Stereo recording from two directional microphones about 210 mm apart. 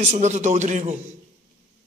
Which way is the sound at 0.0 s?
35° right (ahead or behind).